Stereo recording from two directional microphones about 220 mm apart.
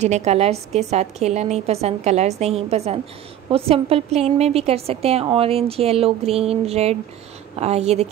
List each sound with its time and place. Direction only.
0.0 s a woman's voice: 30° right (ahead or behind)